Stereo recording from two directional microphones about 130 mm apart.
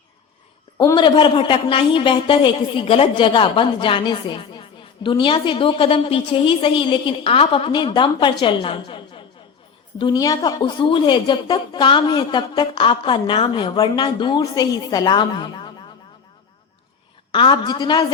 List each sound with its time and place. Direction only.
0.9 s a woman's voice: 40° left (ahead or behind)
17.3 s a woman's voice: 35° left (ahead or behind)